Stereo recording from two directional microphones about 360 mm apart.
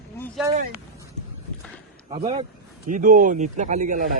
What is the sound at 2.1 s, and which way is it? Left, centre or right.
A man's voice, centre.